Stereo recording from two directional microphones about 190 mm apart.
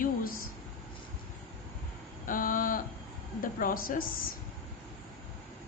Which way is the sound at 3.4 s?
45° left (ahead or behind).